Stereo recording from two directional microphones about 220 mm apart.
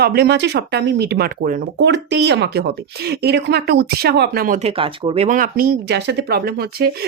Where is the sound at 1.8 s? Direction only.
50° right (ahead or behind); by 5.2 s 25° right (ahead or behind).